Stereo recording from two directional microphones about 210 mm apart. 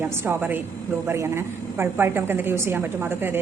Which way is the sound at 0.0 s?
10° right (ahead or behind).